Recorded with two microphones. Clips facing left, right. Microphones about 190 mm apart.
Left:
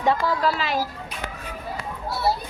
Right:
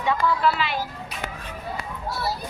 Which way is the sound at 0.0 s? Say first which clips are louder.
Left 1 dB; 35° left (ahead or behind).